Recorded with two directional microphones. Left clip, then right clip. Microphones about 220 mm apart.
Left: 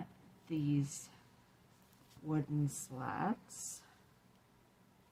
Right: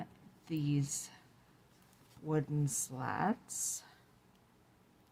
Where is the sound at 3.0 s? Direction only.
50° right (ahead or behind).